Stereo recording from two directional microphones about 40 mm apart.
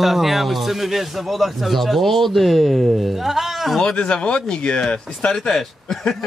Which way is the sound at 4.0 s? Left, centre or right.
Left.